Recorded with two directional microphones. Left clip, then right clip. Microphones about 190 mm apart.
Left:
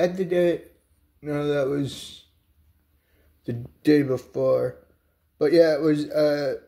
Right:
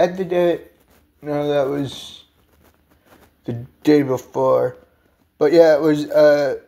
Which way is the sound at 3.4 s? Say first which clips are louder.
Right 4 dB; 10° left (ahead or behind).